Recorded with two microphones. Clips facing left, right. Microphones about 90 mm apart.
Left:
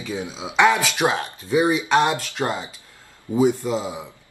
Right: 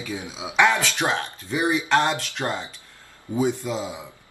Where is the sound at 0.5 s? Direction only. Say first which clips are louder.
Left 2 dB; 10° left (ahead or behind).